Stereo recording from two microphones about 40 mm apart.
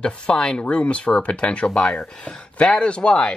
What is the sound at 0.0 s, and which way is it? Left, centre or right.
Speech, left.